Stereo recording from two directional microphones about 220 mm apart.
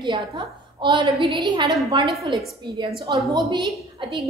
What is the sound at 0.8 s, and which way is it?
A woman's voice, 20° right (ahead or behind).